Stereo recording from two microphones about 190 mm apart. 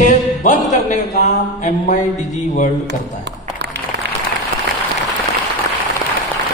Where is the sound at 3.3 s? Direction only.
65° right (ahead or behind).